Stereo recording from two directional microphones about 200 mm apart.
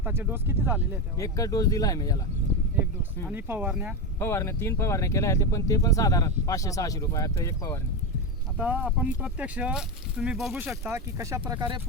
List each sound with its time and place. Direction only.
0.0 s speech: 10° right (ahead or behind)
1.2 s speech: 15° left (ahead or behind)
3.2 s speech: 10° right (ahead or behind)
4.2 s speech: 10° left (ahead or behind)
8.5 s speech: 5° right (ahead or behind)